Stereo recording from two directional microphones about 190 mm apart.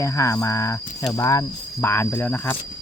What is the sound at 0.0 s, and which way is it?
Speech, 15° left (ahead or behind).